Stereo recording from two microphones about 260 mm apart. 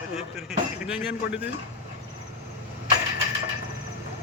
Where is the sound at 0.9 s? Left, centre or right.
Centre.